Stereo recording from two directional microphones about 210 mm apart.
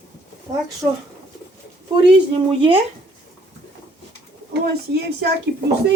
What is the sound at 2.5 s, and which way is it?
Speech, 25° right (ahead or behind).